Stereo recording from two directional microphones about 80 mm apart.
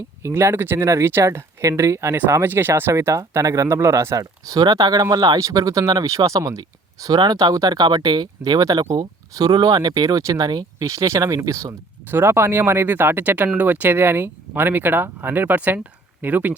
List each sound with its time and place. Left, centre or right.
0.2 s speech: right
6.6 s speech: right
10.8 s speech: right